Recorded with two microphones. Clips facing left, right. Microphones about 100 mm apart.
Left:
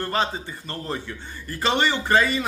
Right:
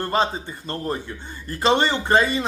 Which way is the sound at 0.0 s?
20° right (ahead or behind).